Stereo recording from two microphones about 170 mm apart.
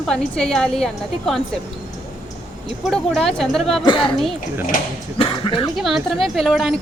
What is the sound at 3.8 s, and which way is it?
Speech, 30° left (ahead or behind).